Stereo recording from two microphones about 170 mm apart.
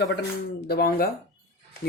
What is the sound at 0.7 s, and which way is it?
Speech, 60° left (ahead or behind).